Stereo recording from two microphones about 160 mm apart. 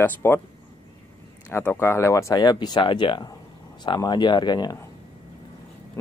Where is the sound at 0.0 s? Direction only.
15° left (ahead or behind).